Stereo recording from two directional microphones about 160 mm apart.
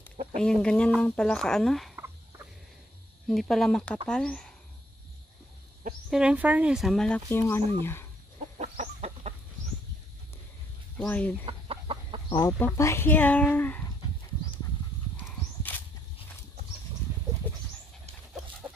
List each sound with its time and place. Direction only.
0.4 s speech: 5° left (ahead or behind)
3.3 s speech: centre (ahead or behind)
6.0 s speech: 5° right (ahead or behind)
7.2 s speech: 15° left (ahead or behind)
8.5 s chicken: 45° right (ahead or behind)
11.0 s speech: 10° left (ahead or behind)
11.4 s chicken: 35° right (ahead or behind)
12.4 s speech: 15° left (ahead or behind)
15.7 s a sound: 10° left (ahead or behind)
17.4 s bird: 10° left (ahead or behind)